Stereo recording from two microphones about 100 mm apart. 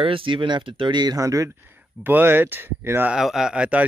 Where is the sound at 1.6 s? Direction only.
20° right (ahead or behind).